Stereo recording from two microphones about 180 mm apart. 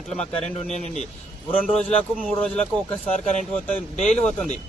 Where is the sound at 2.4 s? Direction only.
5° left (ahead or behind).